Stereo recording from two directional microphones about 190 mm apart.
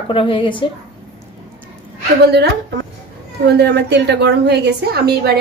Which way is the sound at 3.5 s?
65° right (ahead or behind).